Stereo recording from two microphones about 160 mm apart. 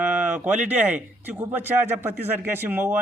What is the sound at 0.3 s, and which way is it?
A man's voice, 10° right (ahead or behind).